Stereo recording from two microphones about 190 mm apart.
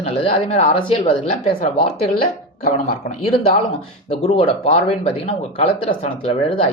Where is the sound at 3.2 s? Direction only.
30° left (ahead or behind).